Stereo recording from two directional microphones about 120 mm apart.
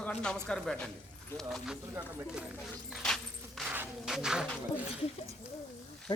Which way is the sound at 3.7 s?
10° right (ahead or behind).